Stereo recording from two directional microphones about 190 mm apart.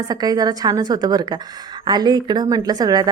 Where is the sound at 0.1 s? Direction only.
20° right (ahead or behind).